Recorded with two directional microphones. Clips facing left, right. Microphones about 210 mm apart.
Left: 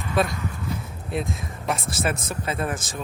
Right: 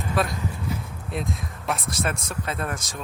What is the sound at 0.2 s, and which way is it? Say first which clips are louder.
Speech: left 3 dB; centre (ahead or behind).